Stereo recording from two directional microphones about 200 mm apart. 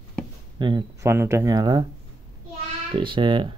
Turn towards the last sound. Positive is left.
turn(degrees=-25)  # may be behind; listen again after turning